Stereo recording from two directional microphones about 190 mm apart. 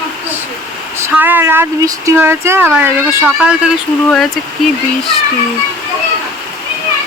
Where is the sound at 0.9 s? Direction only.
10° right (ahead or behind).